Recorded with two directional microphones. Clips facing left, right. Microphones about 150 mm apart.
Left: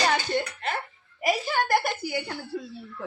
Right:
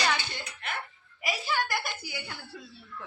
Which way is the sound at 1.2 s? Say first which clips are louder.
Left 6 dB; 50° left (ahead or behind).